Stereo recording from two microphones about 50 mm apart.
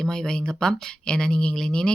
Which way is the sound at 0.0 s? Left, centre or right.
Centre.